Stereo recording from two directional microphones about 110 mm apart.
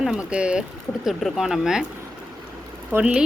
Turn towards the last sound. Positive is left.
turn(degrees=-15)  # may be behind; listen again after turning